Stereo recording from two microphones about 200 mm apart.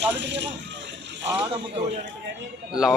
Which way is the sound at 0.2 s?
60° right (ahead or behind).